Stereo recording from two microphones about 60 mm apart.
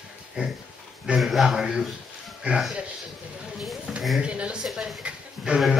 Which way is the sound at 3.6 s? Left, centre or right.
Centre.